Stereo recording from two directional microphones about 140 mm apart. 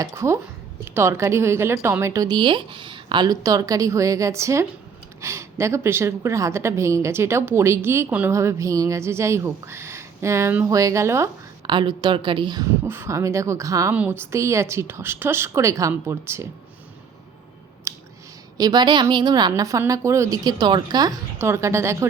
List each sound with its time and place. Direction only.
0.0 s a woman's voice: 20° right (ahead or behind)
11.6 s a woman's voice: 35° right (ahead or behind)
12.8 s a woman's voice: 15° right (ahead or behind)
17.9 s a sound: 20° right (ahead or behind)
18.5 s a woman's voice: 30° right (ahead or behind)